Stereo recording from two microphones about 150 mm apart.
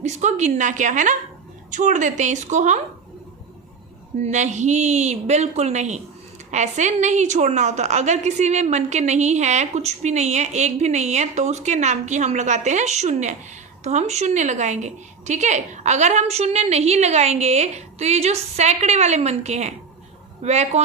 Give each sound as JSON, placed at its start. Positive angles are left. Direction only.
{"t": 0.0, "sound": "a woman's voice", "side_deg": -50}
{"t": 4.2, "sound": "a woman's voice", "side_deg": -50}